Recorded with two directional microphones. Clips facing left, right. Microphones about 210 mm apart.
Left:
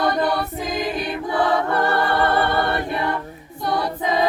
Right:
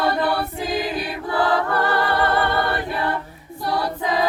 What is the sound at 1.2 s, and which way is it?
Choir, 20° left (ahead or behind).